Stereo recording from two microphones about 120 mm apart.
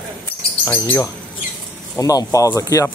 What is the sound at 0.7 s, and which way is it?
Speech, 20° left (ahead or behind).